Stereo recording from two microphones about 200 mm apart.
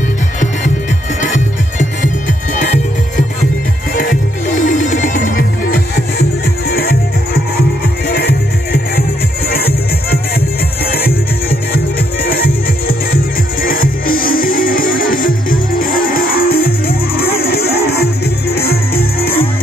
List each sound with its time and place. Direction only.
1.2 s music: 40° left (ahead or behind)
3.9 s music: 45° left (ahead or behind)
10.9 s music: 50° left (ahead or behind)
12.3 s music: 50° left (ahead or behind)